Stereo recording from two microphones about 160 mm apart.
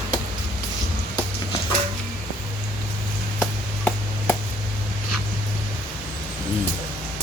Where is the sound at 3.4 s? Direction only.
5° left (ahead or behind).